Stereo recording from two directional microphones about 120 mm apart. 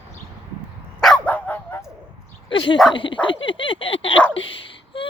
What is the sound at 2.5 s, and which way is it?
Speech, 40° left (ahead or behind).